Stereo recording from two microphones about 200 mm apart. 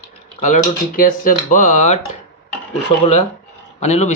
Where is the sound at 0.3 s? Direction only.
35° left (ahead or behind).